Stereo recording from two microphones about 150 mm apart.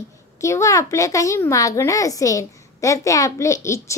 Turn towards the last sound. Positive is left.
turn(degrees=20)  # may be behind; listen again after turning